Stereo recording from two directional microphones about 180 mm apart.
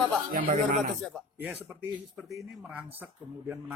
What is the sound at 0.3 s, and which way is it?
Speech, 50° right (ahead or behind).